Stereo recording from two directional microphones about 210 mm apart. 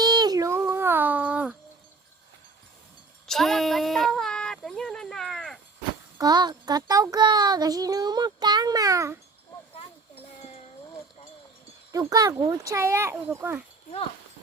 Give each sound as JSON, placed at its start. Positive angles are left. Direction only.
{"t": 0.0, "sound": "child singing", "side_deg": -20}
{"t": 3.2, "sound": "child singing", "side_deg": 0}
{"t": 6.1, "sound": "child singing", "side_deg": -20}
{"t": 9.7, "sound": "a sound", "side_deg": 25}
{"t": 11.9, "sound": "a child's voice", "side_deg": -15}